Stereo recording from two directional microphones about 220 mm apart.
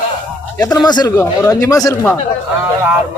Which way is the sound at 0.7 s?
20° left (ahead or behind).